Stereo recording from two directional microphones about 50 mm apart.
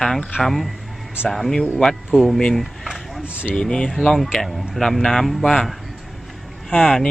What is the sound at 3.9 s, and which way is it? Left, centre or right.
Speech, centre.